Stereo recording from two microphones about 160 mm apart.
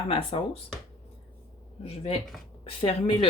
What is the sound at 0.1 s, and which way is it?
Speech, 35° left (ahead or behind).